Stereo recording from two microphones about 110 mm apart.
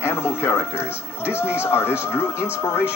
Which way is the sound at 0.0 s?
25° left (ahead or behind).